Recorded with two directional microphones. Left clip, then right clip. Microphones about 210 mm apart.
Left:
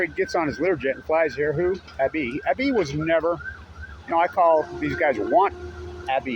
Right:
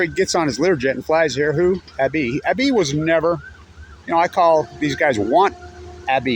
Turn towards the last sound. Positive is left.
turn(degrees=-45)  # may be behind; listen again after turning